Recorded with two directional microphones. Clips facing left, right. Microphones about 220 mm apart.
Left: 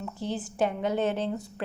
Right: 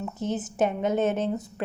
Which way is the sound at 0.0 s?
20° right (ahead or behind).